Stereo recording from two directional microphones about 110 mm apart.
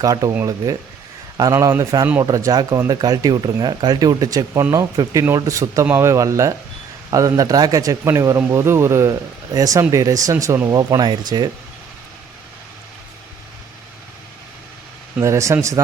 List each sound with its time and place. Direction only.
0.0 s speech: 35° right (ahead or behind)
15.2 s speech: 25° right (ahead or behind)